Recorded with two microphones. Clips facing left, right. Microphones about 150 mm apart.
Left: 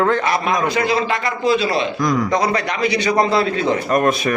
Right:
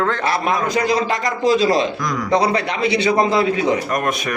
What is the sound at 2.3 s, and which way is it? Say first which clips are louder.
A man's voice: right 1 dB; 30° right (ahead or behind).